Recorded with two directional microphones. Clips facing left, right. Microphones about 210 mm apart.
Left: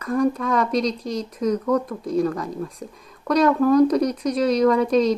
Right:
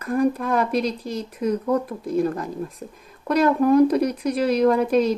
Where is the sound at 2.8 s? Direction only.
5° right (ahead or behind).